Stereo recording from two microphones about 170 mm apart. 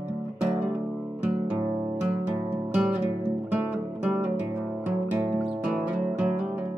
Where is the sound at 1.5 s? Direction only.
20° right (ahead or behind).